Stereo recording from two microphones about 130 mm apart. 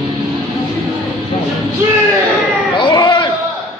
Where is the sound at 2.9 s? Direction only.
35° left (ahead or behind).